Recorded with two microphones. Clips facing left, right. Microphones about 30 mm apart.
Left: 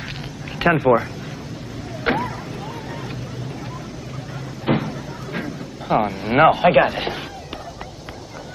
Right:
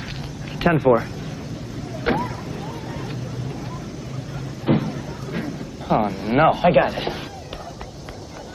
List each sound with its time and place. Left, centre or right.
0.7 s speech: centre
2.1 s vehicle: centre
4.7 s a sound: left
5.4 s a sound: centre
6.5 s speech: centre
6.9 s speech: centre